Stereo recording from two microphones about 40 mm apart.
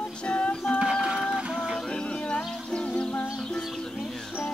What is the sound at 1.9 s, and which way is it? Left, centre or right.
Music, left.